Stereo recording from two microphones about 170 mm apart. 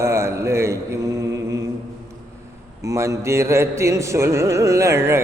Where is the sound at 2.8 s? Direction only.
15° right (ahead or behind).